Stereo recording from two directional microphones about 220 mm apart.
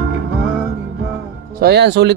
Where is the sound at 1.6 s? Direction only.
50° right (ahead or behind).